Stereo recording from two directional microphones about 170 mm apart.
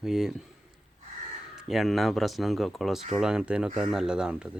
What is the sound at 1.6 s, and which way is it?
Speech, centre (ahead or behind).